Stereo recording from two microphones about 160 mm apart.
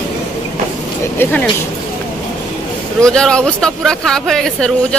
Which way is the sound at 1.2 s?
10° left (ahead or behind).